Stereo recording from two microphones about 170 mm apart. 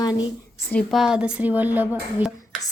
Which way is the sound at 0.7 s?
Centre (ahead or behind).